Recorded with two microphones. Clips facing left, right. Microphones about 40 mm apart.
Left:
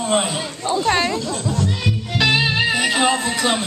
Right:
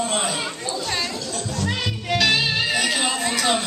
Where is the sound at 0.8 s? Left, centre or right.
Left.